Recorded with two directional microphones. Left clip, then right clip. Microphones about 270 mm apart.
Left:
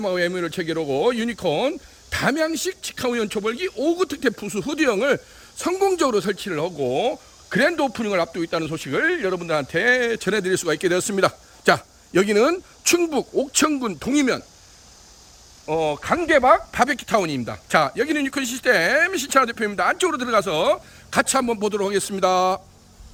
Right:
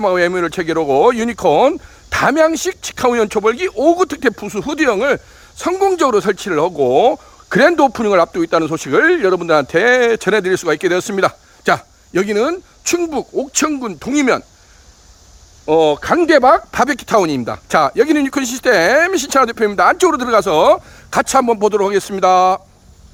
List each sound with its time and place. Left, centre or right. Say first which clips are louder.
0.0 s speech: right 9 dB; centre
15.6 s speech: right 10 dB; right